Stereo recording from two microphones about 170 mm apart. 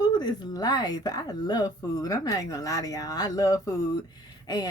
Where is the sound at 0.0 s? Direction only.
25° left (ahead or behind).